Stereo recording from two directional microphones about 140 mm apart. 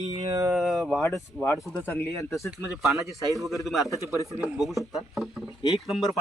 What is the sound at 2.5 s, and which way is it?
Speech, centre (ahead or behind).